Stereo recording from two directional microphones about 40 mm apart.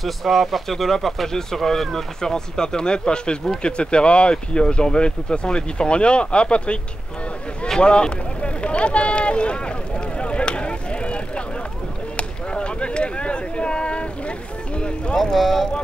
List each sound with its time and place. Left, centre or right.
0.0 s speech: centre; by 6.8 s left
7.8 s vehicle: left
12.2 s a sound: left
14.8 s vehicle: left
15.3 s speech: centre